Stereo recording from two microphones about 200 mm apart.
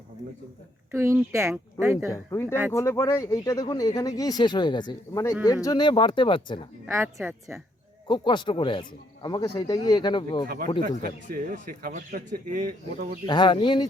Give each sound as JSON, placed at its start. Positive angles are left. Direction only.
{"t": 0.9, "sound": "a woman's voice", "side_deg": -15}
{"t": 2.1, "sound": "speech", "side_deg": 15}
{"t": 6.8, "sound": "a woman's voice", "side_deg": -10}
{"t": 8.0, "sound": "speech", "side_deg": 25}
{"t": 10.8, "sound": "speech", "side_deg": -45}
{"t": 13.2, "sound": "speech", "side_deg": 20}